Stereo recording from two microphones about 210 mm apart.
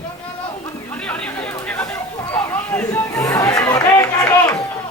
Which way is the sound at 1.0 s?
5° left (ahead or behind).